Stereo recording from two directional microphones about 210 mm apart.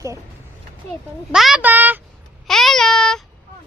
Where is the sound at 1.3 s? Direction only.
Centre (ahead or behind).